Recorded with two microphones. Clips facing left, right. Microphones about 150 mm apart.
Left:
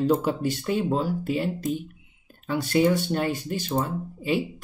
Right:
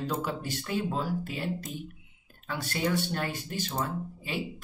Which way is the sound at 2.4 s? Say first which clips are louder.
Left 10 dB; 20° left (ahead or behind).